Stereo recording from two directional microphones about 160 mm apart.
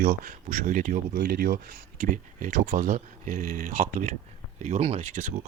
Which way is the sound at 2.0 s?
60° right (ahead or behind).